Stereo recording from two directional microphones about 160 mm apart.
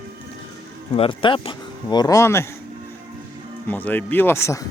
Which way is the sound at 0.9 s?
30° left (ahead or behind).